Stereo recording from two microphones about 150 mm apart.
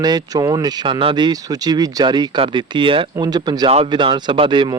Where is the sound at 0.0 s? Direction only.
25° right (ahead or behind).